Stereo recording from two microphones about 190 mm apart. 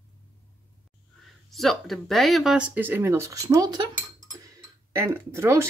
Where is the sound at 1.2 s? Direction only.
Centre (ahead or behind).